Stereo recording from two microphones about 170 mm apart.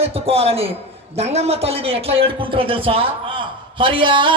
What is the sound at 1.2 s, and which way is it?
A man's voice, 40° right (ahead or behind).